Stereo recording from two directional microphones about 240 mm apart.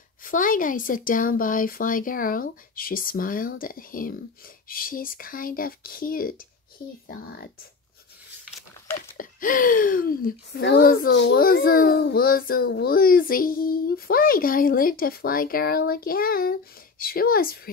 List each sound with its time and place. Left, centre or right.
0.2 s speech: left
9.1 s speech: left